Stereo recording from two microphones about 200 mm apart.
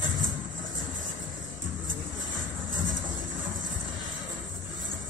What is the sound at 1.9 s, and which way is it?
Music, 70° right (ahead or behind).